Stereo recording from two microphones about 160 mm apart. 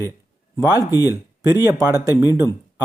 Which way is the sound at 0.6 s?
20° right (ahead or behind).